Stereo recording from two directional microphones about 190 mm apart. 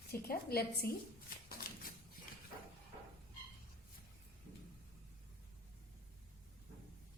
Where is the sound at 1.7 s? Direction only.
50° left (ahead or behind).